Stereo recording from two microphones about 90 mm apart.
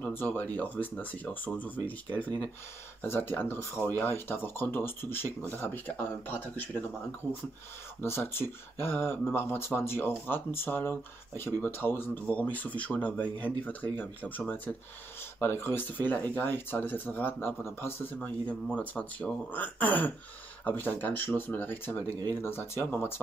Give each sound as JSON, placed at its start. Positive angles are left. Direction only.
{"t": 0.0, "sound": "speech", "side_deg": 20}
{"t": 8.0, "sound": "speech", "side_deg": 25}
{"t": 18.8, "sound": "speech", "side_deg": 15}
{"t": 22.0, "sound": "speech", "side_deg": -45}
{"t": 22.4, "sound": "speech", "side_deg": 25}